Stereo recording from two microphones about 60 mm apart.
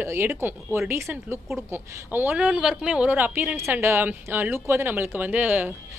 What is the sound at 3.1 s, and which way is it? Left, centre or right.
A woman's voice, right.